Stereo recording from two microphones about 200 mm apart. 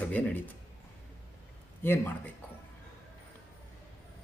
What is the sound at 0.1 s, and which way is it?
Speech, 10° left (ahead or behind).